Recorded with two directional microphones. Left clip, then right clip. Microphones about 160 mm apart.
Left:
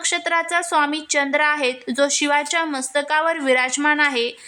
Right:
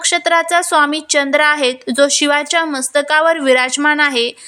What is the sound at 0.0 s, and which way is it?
A woman's voice, 20° right (ahead or behind).